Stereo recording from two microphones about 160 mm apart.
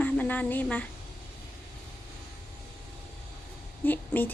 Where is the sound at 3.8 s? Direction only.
10° left (ahead or behind).